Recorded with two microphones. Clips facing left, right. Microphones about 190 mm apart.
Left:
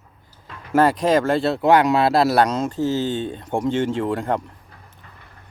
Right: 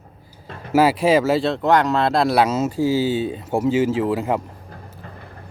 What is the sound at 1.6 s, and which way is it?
Speech, 10° left (ahead or behind).